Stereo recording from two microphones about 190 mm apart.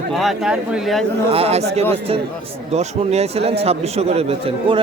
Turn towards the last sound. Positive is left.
turn(degrees=-30)  # may be behind; listen again after turning